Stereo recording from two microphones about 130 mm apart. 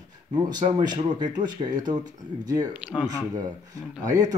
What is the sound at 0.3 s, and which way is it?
Speech, 35° right (ahead or behind).